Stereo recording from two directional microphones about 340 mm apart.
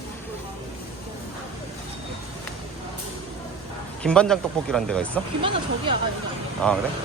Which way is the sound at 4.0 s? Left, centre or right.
Centre.